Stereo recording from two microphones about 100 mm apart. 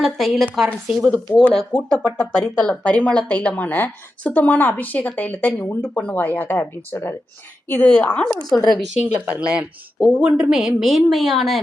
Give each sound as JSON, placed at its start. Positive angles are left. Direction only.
{"t": 0.0, "sound": "a woman's voice", "side_deg": 0}
{"t": 1.5, "sound": "a woman's voice", "side_deg": 10}
{"t": 8.4, "sound": "a woman's voice", "side_deg": 5}
{"t": 9.1, "sound": "speech", "side_deg": -15}